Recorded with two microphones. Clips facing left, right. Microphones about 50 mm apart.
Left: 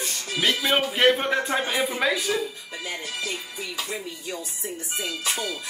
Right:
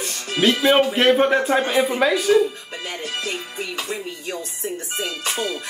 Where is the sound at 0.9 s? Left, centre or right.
Centre.